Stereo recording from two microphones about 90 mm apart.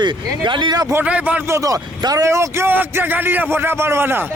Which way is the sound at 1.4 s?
35° right (ahead or behind).